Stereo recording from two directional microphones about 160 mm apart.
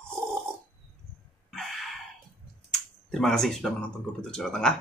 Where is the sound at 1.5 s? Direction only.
Centre (ahead or behind).